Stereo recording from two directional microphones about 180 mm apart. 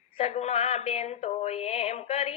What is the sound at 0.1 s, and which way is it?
Mantra, 35° left (ahead or behind).